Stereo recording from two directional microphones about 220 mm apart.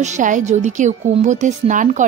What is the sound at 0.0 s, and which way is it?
A woman's voice, 35° right (ahead or behind).